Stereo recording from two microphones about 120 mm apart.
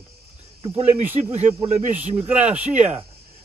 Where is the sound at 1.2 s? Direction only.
60° right (ahead or behind).